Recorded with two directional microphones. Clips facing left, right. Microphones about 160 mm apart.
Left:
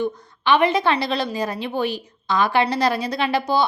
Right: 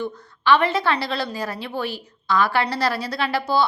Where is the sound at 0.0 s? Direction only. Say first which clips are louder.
Left 2 dB; 15° left (ahead or behind).